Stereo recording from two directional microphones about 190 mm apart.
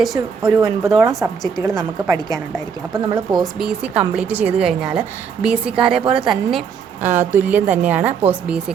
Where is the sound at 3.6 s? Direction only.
5° right (ahead or behind).